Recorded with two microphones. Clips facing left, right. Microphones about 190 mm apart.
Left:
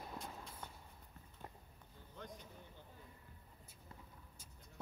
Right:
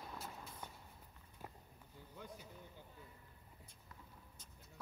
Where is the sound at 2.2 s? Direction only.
10° right (ahead or behind).